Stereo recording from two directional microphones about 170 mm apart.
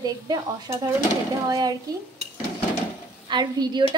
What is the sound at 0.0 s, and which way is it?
A woman's voice, 20° right (ahead or behind).